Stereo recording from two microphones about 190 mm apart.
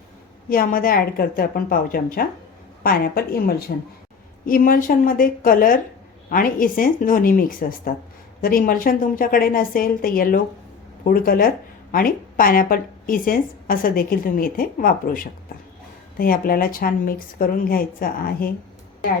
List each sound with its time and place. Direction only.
0.5 s speech: 45° left (ahead or behind)